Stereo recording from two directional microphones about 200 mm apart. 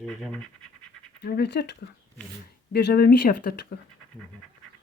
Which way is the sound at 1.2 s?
55° left (ahead or behind).